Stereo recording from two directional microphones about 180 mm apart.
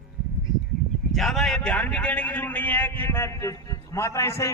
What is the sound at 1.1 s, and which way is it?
A man's voice, centre (ahead or behind).